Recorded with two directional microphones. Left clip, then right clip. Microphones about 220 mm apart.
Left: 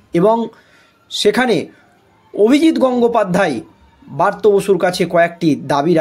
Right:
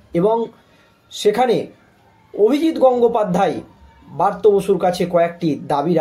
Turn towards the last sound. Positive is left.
turn(degrees=45)  # may be behind; listen again after turning